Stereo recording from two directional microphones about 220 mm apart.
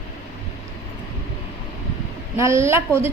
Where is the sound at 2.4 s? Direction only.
10° right (ahead or behind).